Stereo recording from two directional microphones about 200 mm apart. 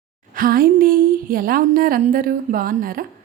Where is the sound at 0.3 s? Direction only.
45° right (ahead or behind).